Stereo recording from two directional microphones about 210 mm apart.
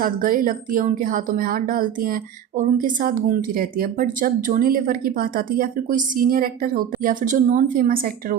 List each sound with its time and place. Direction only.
0.0 s speech: 40° right (ahead or behind)